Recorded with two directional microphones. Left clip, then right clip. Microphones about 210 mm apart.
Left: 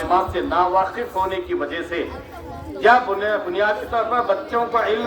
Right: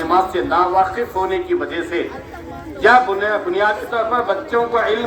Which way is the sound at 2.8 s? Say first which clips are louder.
Right 3 dB; 25° right (ahead or behind).